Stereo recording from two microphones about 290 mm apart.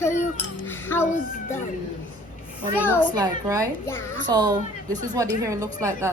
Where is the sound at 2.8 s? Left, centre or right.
Centre.